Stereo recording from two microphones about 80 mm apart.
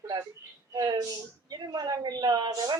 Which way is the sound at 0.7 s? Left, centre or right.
Right.